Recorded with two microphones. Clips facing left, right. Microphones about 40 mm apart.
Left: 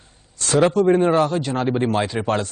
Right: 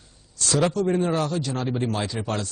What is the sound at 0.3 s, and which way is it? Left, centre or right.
Speech, left.